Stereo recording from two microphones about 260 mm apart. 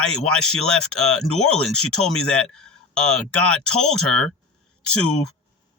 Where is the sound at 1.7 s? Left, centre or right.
Left.